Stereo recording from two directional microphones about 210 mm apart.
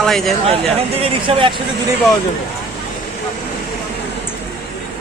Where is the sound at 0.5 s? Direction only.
25° right (ahead or behind).